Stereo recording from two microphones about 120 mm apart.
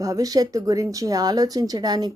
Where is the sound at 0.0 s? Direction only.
30° right (ahead or behind).